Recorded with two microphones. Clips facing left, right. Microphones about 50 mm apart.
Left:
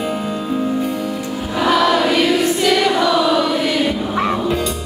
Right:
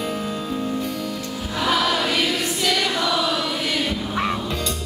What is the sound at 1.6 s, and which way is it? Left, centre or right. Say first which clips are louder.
Choir: left 6 dB; centre.